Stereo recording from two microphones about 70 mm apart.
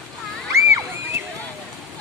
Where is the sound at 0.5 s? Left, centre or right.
Right.